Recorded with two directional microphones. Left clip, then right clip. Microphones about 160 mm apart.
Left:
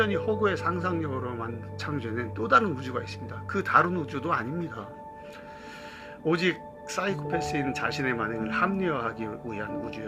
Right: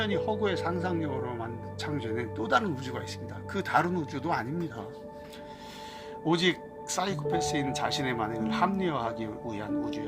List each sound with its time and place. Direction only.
0.0 s speech: 30° right (ahead or behind)
6.2 s speech: 35° right (ahead or behind)